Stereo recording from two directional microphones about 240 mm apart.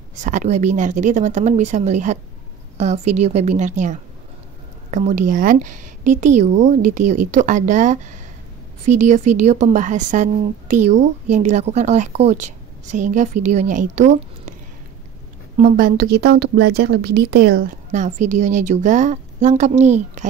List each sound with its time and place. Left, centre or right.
0.2 s a woman's voice: right
15.5 s a woman's voice: right